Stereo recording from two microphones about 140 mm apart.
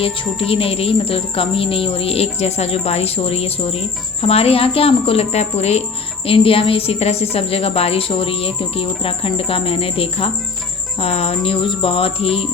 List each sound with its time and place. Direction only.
0.0 s music: 40° left (ahead or behind)
11.4 s cricket: 40° left (ahead or behind)